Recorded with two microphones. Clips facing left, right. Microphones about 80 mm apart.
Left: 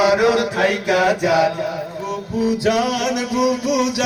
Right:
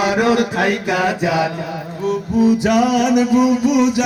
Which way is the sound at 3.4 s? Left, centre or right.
Right.